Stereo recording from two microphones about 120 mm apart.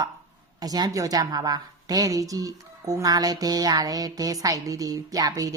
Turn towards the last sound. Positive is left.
turn(degrees=-30)  # may be behind; listen again after turning